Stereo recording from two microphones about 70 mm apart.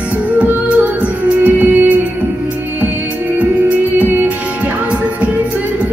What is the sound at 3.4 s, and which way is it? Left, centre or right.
Music, right.